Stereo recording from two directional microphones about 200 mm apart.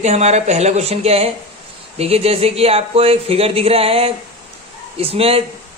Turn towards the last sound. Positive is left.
turn(degrees=-30)  # may be behind; listen again after turning